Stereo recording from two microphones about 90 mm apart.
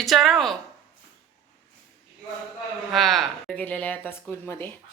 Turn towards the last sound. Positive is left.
turn(degrees=25)  # may be behind; listen again after turning